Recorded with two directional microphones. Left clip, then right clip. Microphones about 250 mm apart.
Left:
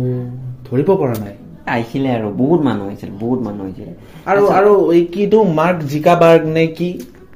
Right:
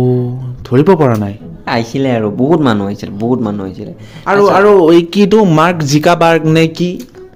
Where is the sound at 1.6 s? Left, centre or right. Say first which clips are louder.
Right 4 dB; right.